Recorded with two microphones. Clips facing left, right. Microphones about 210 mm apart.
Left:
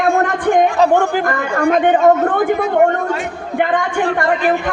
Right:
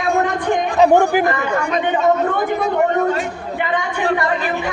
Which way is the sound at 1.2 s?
50° left (ahead or behind).